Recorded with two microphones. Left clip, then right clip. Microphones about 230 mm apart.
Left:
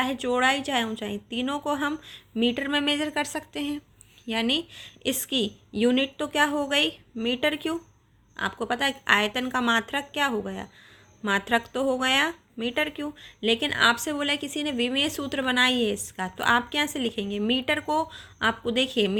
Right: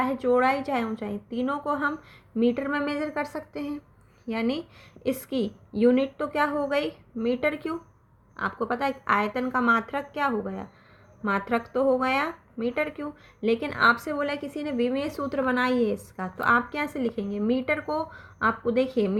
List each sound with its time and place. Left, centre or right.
0.0 s speech: left
3.0 s a woman's voice: left
4.3 s speech: left